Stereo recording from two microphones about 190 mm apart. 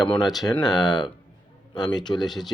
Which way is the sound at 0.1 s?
Centre (ahead or behind).